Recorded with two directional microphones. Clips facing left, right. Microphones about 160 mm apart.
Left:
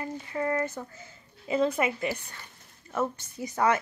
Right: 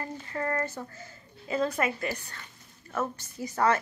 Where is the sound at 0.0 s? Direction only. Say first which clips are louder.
Left 2 dB; 10° left (ahead or behind).